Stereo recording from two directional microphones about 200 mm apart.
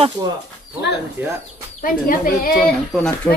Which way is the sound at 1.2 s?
10° right (ahead or behind).